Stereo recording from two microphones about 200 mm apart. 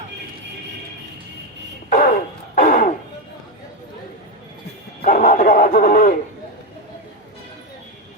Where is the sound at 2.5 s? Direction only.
40° left (ahead or behind).